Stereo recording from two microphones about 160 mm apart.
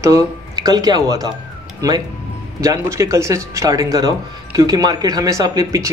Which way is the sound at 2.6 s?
20° right (ahead or behind).